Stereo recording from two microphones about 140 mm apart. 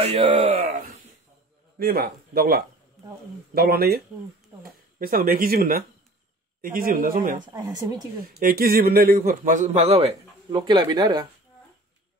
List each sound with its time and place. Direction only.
0.0 s a sound: 45° right (ahead or behind)
1.8 s a man's voice: 90° right
7.5 s speech: 25° right (ahead or behind)
8.2 s a man's voice: 90° right; by 9.8 s 65° right (ahead or behind)
9.8 s speech: 45° right (ahead or behind)
10.5 s speech: 30° right (ahead or behind)